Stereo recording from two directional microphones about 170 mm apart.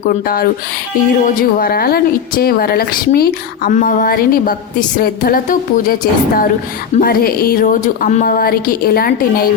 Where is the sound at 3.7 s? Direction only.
50° left (ahead or behind).